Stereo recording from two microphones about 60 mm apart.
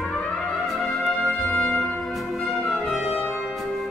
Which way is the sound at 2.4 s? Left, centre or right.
Centre.